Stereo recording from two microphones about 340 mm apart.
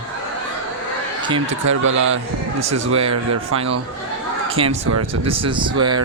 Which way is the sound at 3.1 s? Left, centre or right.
Right.